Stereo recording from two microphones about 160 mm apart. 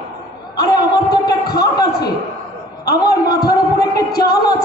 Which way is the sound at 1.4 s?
75° left (ahead or behind).